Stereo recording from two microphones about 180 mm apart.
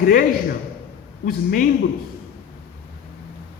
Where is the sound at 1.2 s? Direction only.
50° left (ahead or behind).